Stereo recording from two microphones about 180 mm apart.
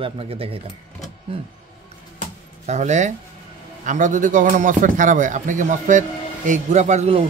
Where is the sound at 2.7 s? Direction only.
40° right (ahead or behind).